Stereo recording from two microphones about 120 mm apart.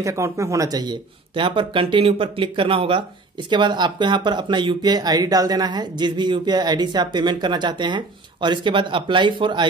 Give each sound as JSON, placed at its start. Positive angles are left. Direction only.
{"t": 0.0, "sound": "speech", "side_deg": -25}